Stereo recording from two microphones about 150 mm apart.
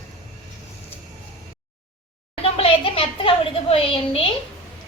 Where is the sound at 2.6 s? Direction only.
40° left (ahead or behind).